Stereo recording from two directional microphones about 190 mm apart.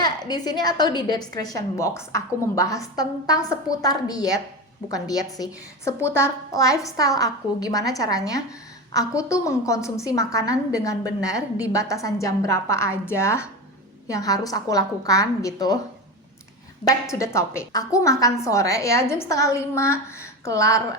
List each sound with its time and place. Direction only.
0.0 s a woman's voice: 20° left (ahead or behind)
16.8 s a woman's voice: 15° left (ahead or behind)